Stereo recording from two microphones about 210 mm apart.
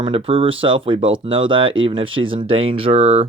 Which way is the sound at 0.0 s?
25° right (ahead or behind).